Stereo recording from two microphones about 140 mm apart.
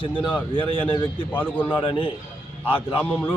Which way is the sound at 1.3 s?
10° left (ahead or behind).